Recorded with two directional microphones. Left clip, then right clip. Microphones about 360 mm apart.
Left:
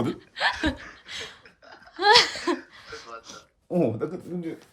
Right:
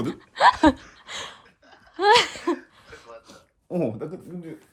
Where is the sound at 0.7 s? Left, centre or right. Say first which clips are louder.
Left 4 dB; centre.